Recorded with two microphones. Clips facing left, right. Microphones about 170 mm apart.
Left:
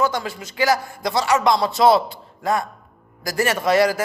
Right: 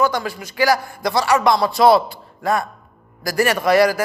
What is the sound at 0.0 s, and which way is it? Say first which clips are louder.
A man's voice: right 2 dB; 25° left (ahead or behind).